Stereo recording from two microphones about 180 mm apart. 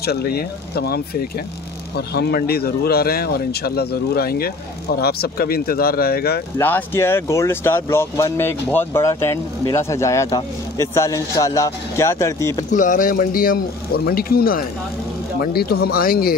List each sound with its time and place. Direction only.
0.0 s speech: 60° left (ahead or behind)
6.6 s speech: 10° left (ahead or behind)
12.7 s speech: 45° left (ahead or behind)